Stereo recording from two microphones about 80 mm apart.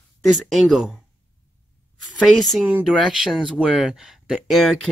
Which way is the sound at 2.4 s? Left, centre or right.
Centre.